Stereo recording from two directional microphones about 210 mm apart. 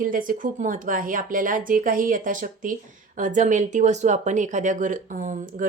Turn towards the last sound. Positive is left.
turn(degrees=-40)  # may be behind; listen again after turning